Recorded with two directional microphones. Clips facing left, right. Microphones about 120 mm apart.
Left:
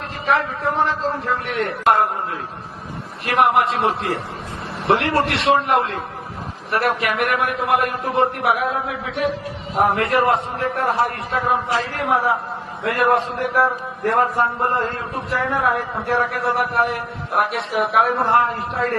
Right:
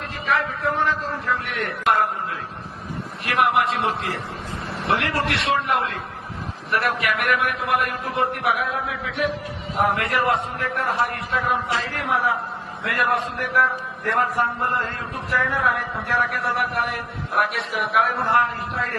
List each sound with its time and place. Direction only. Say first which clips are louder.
0.3 s a man's voice: left 3 dB; 30° left (ahead or behind)
3.2 s a man's voice: left 3 dB; 35° left (ahead or behind)
9.8 s a man's voice: left 4 dB; 30° left (ahead or behind)